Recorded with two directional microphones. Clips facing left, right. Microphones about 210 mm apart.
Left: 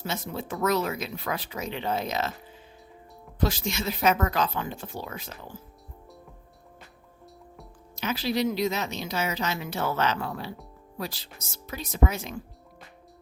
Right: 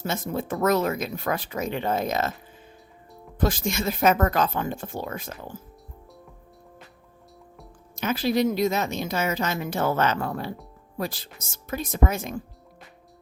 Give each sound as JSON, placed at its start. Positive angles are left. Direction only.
{"t": 0.0, "sound": "a woman's voice", "side_deg": -50}
{"t": 3.3, "sound": "a woman's voice", "side_deg": -50}
{"t": 7.9, "sound": "a woman's voice", "side_deg": -50}